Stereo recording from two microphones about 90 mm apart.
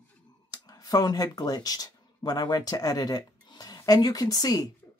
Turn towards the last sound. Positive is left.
turn(degrees=45)  # may be behind; listen again after turning